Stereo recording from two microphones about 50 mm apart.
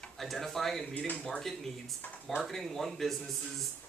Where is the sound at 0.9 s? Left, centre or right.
Left.